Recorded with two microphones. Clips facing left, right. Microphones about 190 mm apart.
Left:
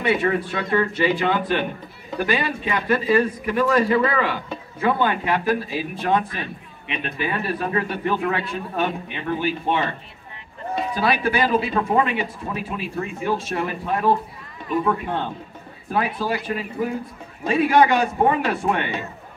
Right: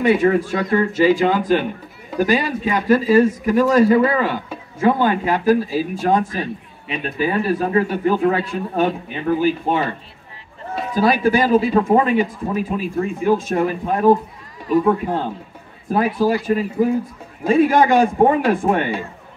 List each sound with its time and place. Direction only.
0.0 s speech: 40° right (ahead or behind)
11.0 s speech: 40° right (ahead or behind)
17.5 s a man's voice: 45° right (ahead or behind)